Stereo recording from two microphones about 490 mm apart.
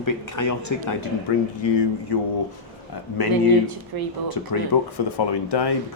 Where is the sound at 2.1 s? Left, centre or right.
Left.